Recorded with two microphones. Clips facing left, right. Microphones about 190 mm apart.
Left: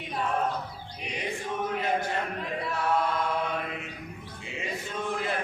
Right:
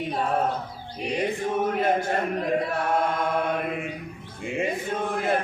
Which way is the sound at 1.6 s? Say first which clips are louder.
Right 4 dB; 50° right (ahead or behind).